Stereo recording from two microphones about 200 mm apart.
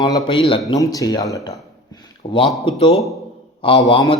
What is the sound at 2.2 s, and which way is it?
Speech, 35° left (ahead or behind).